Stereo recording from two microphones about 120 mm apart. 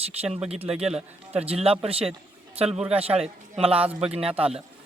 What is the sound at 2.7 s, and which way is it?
Speech, 10° right (ahead or behind).